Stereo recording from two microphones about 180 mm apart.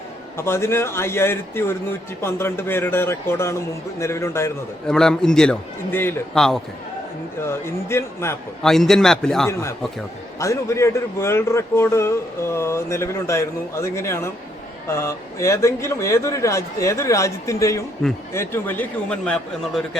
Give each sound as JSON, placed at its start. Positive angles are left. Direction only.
{"t": 0.3, "sound": "a man's voice", "side_deg": 15}
{"t": 4.9, "sound": "a man's voice", "side_deg": 5}
{"t": 7.4, "sound": "a man's voice", "side_deg": 15}
{"t": 8.6, "sound": "a man's voice", "side_deg": 0}
{"t": 9.5, "sound": "a man's voice", "side_deg": 15}